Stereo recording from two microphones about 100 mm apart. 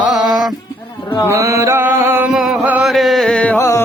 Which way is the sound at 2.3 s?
5° right (ahead or behind).